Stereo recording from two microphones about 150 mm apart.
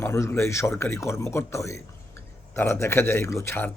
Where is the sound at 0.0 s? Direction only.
20° left (ahead or behind).